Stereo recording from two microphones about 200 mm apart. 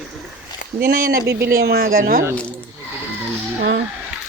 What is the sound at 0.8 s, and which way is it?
Speech, 45° right (ahead or behind).